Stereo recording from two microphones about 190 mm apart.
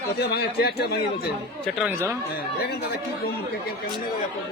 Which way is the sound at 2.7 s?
55° left (ahead or behind).